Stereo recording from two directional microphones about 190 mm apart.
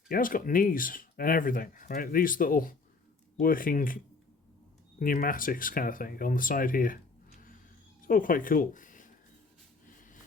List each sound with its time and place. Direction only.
0.1 s speech: 45° left (ahead or behind)
8.0 s speech: 45° left (ahead or behind)